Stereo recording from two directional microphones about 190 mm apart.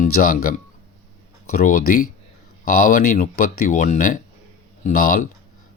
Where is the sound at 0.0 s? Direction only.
50° left (ahead or behind).